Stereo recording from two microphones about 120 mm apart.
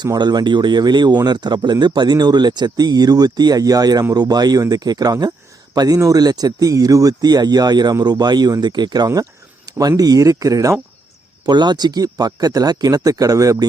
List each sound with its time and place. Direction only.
0.0 s speech: 35° right (ahead or behind)
9.6 s a sound: 30° right (ahead or behind)
10.0 s speech: 30° right (ahead or behind)